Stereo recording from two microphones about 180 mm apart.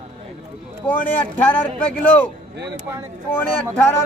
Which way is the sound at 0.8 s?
10° left (ahead or behind).